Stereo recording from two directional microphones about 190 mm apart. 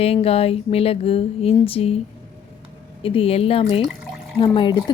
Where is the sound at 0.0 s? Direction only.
30° left (ahead or behind).